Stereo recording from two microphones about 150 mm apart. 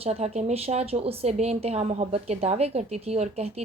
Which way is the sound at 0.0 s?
45° right (ahead or behind).